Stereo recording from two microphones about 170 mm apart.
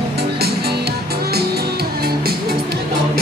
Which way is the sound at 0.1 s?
70° right (ahead or behind).